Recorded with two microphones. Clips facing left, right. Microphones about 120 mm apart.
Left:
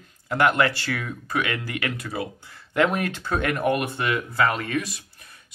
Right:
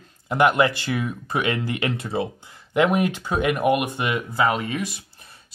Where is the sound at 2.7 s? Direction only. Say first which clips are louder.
Right 3 dB; 15° right (ahead or behind).